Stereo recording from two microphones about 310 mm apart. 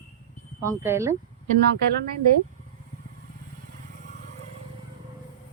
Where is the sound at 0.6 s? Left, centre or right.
Centre.